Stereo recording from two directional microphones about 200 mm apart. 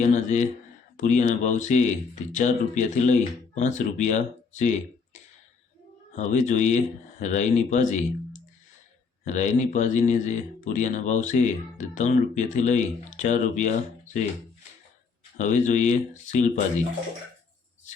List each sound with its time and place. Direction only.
0.0 s speech: 35° left (ahead or behind)
6.1 s speech: 35° left (ahead or behind)
15.4 s speech: 40° left (ahead or behind)